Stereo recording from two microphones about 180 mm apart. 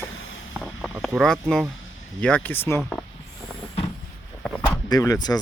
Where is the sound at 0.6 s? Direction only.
Centre (ahead or behind).